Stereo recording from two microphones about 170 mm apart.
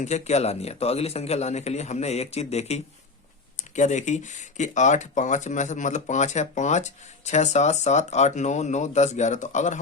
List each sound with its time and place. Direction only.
0.0 s a man's voice: 40° left (ahead or behind)